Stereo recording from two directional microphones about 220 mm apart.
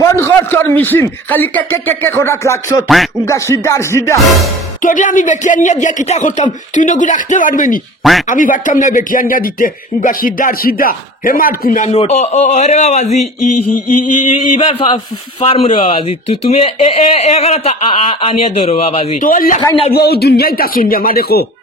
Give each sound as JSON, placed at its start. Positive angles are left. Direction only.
{"t": 0.0, "sound": "a man's voice", "side_deg": 10}
{"t": 4.8, "sound": "speech", "side_deg": 35}
{"t": 8.0, "sound": "speech", "side_deg": 0}
{"t": 8.3, "sound": "speech", "side_deg": 35}
{"t": 13.4, "sound": "mantra", "side_deg": 90}
{"t": 14.6, "sound": "speech", "side_deg": 25}
{"t": 19.6, "sound": "speech", "side_deg": 20}
{"t": 19.9, "sound": "speech", "side_deg": 45}